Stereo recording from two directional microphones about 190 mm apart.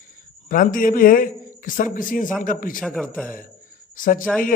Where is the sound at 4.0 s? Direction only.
45° left (ahead or behind).